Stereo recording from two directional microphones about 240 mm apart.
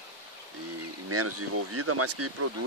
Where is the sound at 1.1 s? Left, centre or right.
Right.